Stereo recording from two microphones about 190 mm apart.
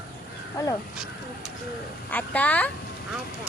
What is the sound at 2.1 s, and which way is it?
Speech, 10° left (ahead or behind).